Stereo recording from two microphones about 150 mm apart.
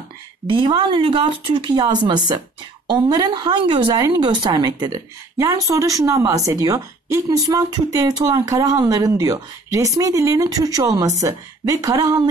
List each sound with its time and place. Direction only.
0.5 s a woman's voice: 30° right (ahead or behind)